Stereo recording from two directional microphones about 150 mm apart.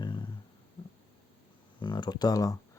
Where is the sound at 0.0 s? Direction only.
30° left (ahead or behind).